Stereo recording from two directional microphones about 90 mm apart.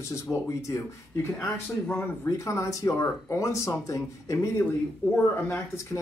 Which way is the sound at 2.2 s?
30° left (ahead or behind).